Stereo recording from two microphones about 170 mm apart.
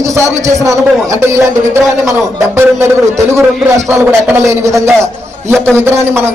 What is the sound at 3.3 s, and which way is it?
A man's voice, 15° right (ahead or behind).